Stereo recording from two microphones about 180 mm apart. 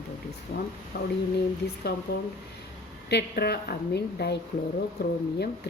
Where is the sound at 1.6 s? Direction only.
65° left (ahead or behind).